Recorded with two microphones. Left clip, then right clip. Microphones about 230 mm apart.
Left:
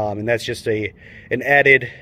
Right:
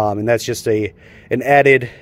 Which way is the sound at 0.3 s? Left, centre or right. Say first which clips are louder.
Right 4 dB; right.